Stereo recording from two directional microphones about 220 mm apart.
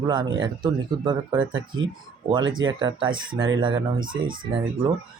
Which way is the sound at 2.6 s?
20° right (ahead or behind).